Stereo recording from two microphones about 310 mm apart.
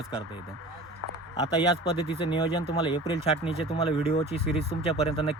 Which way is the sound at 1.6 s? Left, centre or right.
Centre.